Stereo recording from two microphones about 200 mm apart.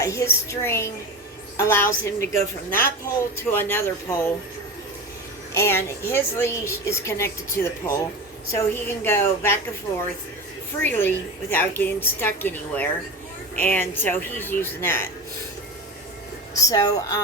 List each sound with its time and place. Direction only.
0.0 s a woman's voice: 15° left (ahead or behind)
5.5 s a woman's voice: 10° left (ahead or behind)
10.8 s a woman's voice: 10° left (ahead or behind)
16.6 s a woman's voice: 20° left (ahead or behind)